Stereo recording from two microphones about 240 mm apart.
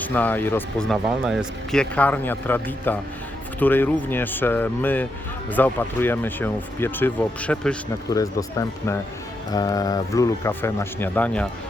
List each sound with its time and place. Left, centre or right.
0.0 s speech: centre